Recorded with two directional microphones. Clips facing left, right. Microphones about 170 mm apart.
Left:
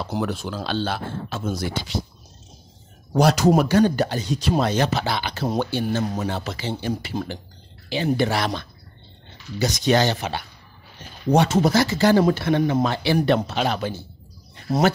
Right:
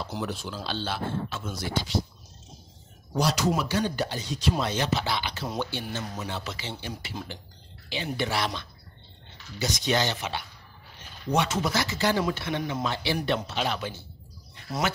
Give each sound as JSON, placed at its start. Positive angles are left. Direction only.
{"t": 0.0, "sound": "speech", "side_deg": 60}
{"t": 3.1, "sound": "speech", "side_deg": 55}